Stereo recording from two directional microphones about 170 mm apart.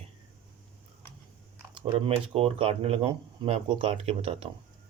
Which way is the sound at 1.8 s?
35° right (ahead or behind).